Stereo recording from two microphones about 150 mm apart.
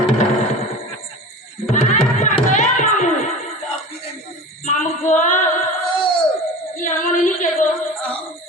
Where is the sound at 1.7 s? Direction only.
55° left (ahead or behind).